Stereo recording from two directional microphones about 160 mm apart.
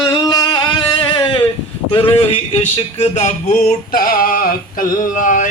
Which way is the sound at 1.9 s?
35° left (ahead or behind).